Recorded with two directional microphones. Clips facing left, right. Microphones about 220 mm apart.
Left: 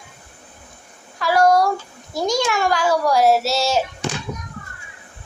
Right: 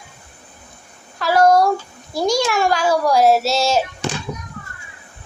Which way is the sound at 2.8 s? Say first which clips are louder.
Right 1 dB; 15° right (ahead or behind).